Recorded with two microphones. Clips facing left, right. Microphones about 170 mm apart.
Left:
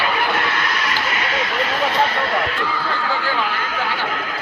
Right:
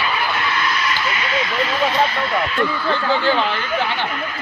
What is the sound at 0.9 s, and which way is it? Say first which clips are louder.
Vehicle: even; 50° left (ahead or behind).